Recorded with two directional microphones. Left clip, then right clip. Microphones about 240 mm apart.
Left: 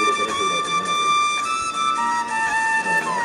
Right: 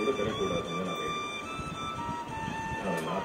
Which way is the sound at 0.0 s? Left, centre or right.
Left.